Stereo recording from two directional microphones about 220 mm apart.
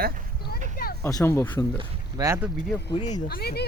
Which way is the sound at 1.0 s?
15° left (ahead or behind).